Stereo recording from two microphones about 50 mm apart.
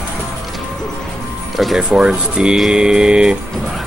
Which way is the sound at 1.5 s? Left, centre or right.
Centre.